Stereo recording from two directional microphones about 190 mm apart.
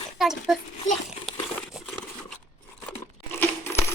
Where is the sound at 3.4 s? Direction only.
15° left (ahead or behind).